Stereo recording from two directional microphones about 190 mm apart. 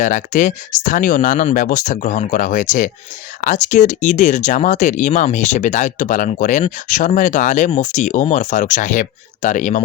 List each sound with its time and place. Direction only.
0.0 s speech: 40° left (ahead or behind)